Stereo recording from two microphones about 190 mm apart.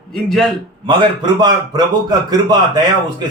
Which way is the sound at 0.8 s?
25° right (ahead or behind).